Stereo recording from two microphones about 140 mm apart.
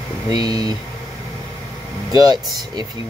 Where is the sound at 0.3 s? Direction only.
30° right (ahead or behind).